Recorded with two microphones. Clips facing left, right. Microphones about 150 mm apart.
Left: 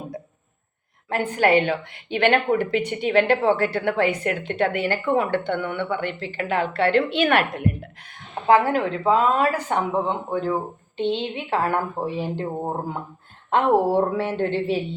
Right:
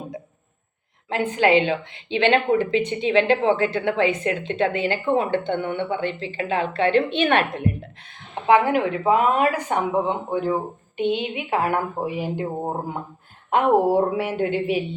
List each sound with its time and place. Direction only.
1.1 s a woman's voice: 20° right (ahead or behind)